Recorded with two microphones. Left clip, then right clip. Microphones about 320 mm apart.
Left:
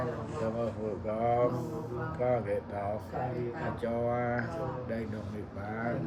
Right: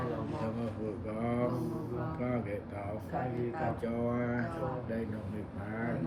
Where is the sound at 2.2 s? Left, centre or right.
Left.